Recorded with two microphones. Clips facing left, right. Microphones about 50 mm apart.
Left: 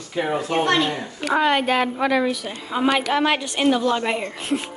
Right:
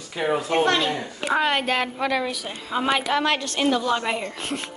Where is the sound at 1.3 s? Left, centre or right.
Centre.